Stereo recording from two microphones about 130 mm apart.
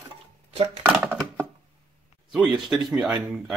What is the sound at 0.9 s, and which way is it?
Speech, 10° right (ahead or behind).